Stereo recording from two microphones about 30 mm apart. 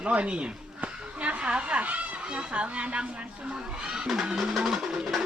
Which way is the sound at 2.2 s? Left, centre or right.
Right.